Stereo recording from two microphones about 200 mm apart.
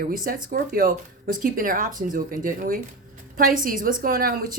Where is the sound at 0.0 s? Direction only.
45° right (ahead or behind).